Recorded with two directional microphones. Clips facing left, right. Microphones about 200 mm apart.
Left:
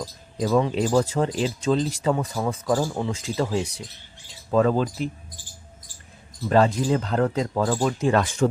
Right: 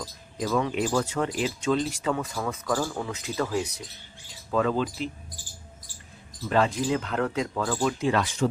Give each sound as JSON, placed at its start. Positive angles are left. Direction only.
{"t": 0.3, "sound": "speech", "side_deg": 30}
{"t": 4.5, "sound": "speech", "side_deg": 40}
{"t": 6.5, "sound": "speech", "side_deg": 40}